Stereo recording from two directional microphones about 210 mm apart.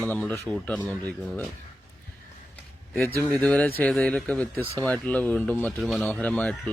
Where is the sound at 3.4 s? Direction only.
5° left (ahead or behind).